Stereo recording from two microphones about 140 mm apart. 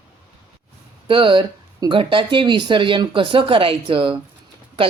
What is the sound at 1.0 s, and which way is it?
Speech, 40° right (ahead or behind).